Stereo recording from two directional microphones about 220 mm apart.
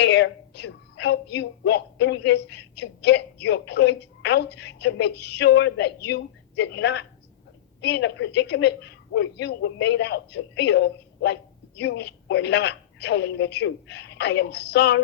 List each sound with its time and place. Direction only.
0.0 s a woman's voice: 50° left (ahead or behind)